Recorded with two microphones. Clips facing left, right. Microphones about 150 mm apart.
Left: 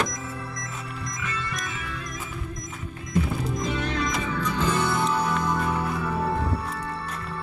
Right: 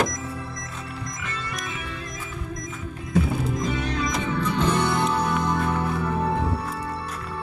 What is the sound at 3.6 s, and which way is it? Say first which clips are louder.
Music: right 1 dB; centre (ahead or behind).